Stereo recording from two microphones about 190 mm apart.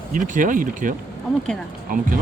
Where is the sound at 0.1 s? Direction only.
45° right (ahead or behind).